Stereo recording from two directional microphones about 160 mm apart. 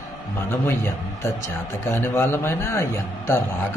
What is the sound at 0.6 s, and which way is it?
Speech, 15° left (ahead or behind).